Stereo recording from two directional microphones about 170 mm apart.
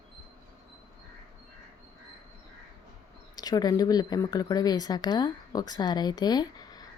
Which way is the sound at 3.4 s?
25° left (ahead or behind).